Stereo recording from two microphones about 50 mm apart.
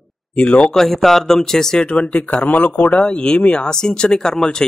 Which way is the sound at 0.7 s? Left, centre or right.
Centre.